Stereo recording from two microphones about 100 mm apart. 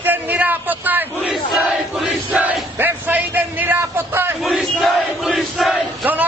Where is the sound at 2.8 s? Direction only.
20° right (ahead or behind).